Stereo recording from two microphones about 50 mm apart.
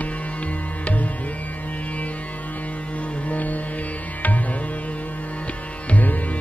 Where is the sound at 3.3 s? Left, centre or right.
Left.